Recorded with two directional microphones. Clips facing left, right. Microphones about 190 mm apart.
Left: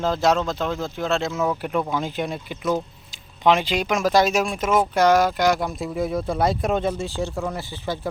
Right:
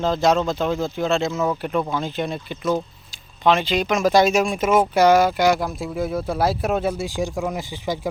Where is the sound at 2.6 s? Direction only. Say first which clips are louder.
Right 1 dB; centre (ahead or behind).